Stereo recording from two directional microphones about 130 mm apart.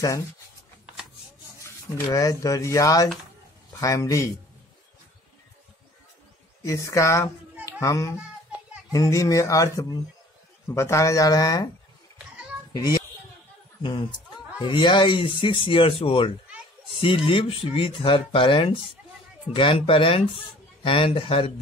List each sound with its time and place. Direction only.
2.1 s speech: 25° left (ahead or behind)
6.6 s speech: 25° left (ahead or behind)
7.6 s children playing: 25° left (ahead or behind)
8.9 s speech: 25° left (ahead or behind)
12.7 s a child's voice: 30° left (ahead or behind)